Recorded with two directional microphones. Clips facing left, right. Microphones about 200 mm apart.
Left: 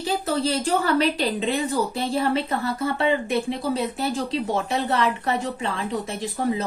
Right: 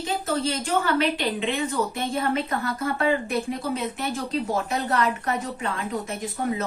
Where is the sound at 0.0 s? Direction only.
35° left (ahead or behind).